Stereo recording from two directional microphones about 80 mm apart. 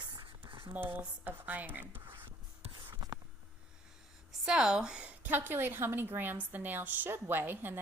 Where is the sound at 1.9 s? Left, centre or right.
Right.